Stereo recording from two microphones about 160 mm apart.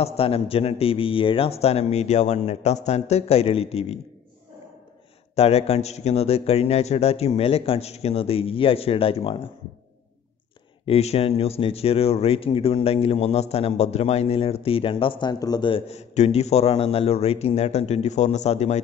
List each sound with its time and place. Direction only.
0.0 s speech: 40° left (ahead or behind)
5.3 s speech: 40° left (ahead or behind)
10.9 s speech: 40° left (ahead or behind)